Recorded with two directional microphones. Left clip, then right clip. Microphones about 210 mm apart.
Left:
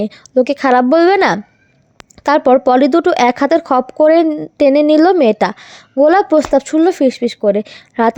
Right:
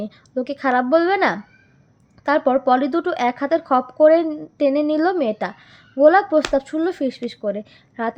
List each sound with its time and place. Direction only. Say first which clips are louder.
0.0 s a woman's voice: left 12 dB; 40° left (ahead or behind)